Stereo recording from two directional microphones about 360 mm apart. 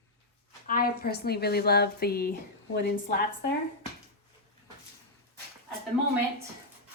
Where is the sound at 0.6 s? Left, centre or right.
Left.